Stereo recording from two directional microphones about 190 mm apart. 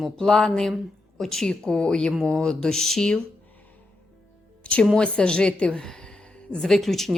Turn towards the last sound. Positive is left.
turn(degrees=0)  # may be behind; listen again after turning